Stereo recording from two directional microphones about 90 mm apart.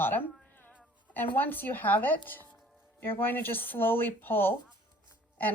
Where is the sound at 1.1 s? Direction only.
20° left (ahead or behind).